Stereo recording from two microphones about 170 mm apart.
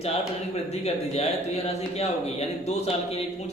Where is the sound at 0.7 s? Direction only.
40° left (ahead or behind).